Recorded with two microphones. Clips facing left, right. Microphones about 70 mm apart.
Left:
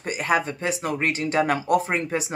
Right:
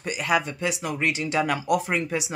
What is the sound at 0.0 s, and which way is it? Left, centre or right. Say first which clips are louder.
Speech: left 1 dB; left.